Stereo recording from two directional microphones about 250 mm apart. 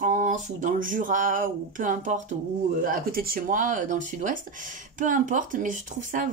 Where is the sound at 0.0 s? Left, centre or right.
Right.